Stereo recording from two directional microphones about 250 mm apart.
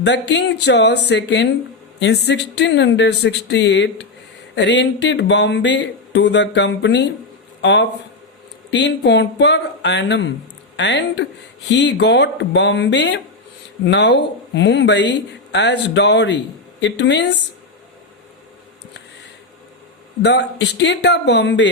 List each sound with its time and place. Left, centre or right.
0.0 s speech: left
20.2 s speech: left